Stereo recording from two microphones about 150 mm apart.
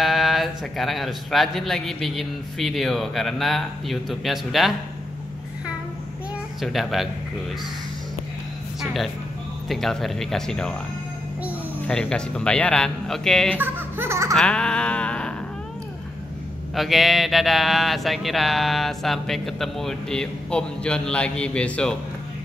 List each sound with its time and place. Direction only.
0.0 s speech: centre (ahead or behind)
6.6 s speech: centre (ahead or behind)
9.7 s speech: centre (ahead or behind)
11.9 s speech: 5° left (ahead or behind)
13.6 s speech: 15° right (ahead or behind)
14.3 s a sound: 5° left (ahead or behind)
16.7 s speech: centre (ahead or behind)